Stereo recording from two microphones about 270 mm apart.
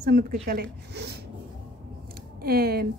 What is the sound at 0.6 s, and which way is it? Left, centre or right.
Speech, right.